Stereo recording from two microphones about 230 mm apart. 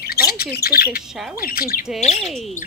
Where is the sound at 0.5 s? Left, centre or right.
Left.